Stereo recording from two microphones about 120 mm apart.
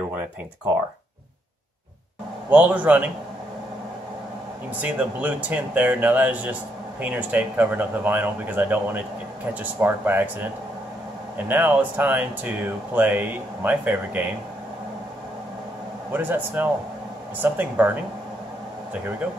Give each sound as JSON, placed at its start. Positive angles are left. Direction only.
{"t": 2.5, "sound": "speech", "side_deg": -10}
{"t": 4.8, "sound": "speech", "side_deg": -10}
{"t": 16.1, "sound": "speech", "side_deg": -15}